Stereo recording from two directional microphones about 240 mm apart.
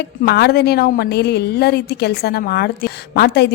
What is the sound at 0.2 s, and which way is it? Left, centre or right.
A woman's voice, left.